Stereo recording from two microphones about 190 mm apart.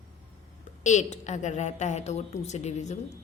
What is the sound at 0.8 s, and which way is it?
A woman's voice, 40° left (ahead or behind).